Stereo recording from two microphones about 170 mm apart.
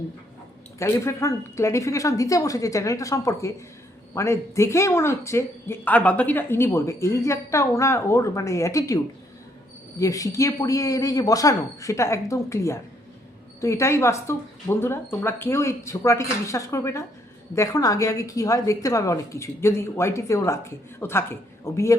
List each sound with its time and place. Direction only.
0.8 s speech: 15° left (ahead or behind)
10.0 s speech: 20° left (ahead or behind)